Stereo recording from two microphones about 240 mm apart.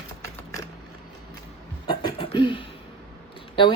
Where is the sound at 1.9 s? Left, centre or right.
Centre.